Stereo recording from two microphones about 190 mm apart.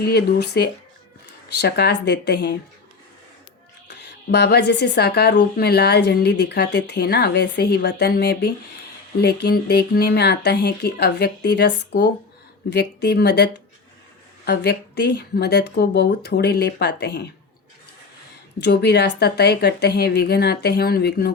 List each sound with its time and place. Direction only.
0.0 s speech: 60° left (ahead or behind)
3.8 s speech: 60° left (ahead or behind)
18.6 s speech: 60° left (ahead or behind)